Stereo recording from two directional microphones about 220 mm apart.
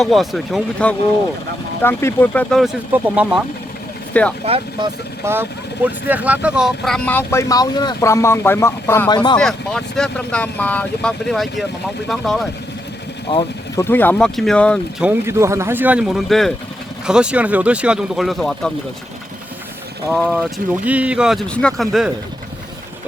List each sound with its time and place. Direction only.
0.0 s speech: centre (ahead or behind)
4.4 s speech: 25° right (ahead or behind)
5.2 s speech: 10° right (ahead or behind); by 9.4 s 20° left (ahead or behind)
9.4 s speech: centre (ahead or behind)
15.0 s speech: 10° right (ahead or behind)
20.1 s speech: centre (ahead or behind)